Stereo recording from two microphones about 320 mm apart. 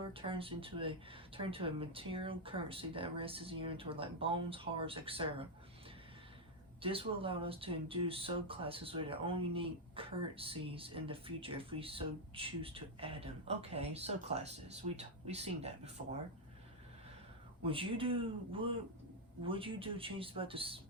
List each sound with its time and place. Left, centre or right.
0.1 s speech: centre
6.8 s speech: centre
17.6 s speech: centre